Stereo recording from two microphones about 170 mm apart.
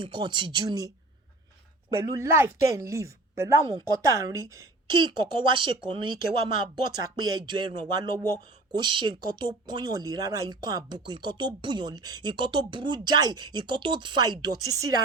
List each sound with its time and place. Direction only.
0.0 s speech: 25° right (ahead or behind)
1.9 s speech: 25° right (ahead or behind)
4.9 s speech: 30° right (ahead or behind)